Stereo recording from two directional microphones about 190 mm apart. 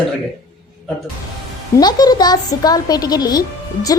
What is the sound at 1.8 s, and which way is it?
A woman's voice, 20° left (ahead or behind).